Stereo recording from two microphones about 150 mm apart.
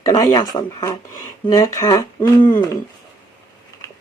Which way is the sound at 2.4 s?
35° left (ahead or behind).